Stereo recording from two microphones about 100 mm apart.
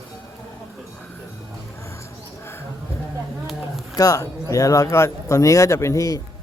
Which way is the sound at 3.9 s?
35° left (ahead or behind).